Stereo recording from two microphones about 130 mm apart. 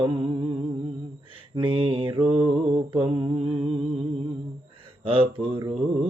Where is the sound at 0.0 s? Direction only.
40° right (ahead or behind).